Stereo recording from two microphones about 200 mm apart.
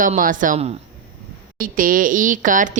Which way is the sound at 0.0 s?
45° right (ahead or behind).